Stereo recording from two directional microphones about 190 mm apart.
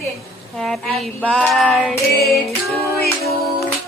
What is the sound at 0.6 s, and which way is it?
A woman's voice, centre (ahead or behind).